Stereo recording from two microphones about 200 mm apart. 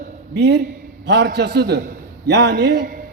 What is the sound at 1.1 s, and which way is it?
A man's voice, 55° right (ahead or behind).